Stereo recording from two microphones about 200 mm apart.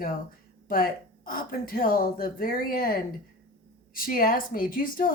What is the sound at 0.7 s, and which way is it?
Speech, 45° left (ahead or behind).